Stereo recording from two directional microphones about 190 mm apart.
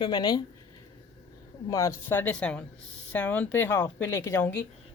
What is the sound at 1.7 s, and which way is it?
A woman's voice, 15° left (ahead or behind).